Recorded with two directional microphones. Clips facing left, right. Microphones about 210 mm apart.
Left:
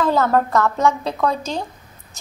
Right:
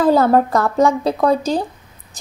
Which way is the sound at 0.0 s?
35° right (ahead or behind).